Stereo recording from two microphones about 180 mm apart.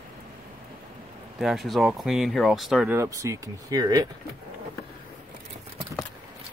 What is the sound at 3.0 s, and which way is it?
Speech, 15° right (ahead or behind).